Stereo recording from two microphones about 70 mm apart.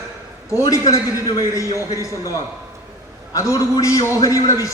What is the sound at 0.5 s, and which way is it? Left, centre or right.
A man's voice, left.